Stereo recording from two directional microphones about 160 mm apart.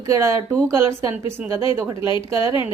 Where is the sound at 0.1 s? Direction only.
20° right (ahead or behind).